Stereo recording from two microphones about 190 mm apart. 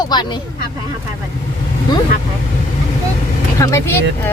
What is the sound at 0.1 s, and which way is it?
Speech, 20° left (ahead or behind).